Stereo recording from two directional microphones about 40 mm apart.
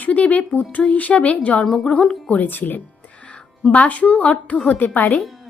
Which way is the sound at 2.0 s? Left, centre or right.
Left.